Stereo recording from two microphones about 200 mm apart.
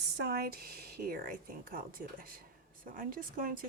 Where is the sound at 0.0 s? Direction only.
55° right (ahead or behind).